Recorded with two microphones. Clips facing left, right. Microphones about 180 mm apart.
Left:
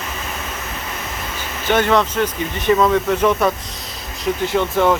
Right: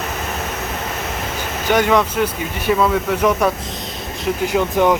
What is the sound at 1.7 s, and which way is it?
Speech, 10° right (ahead or behind).